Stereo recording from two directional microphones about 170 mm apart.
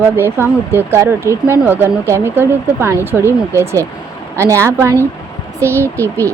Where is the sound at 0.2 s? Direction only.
15° right (ahead or behind).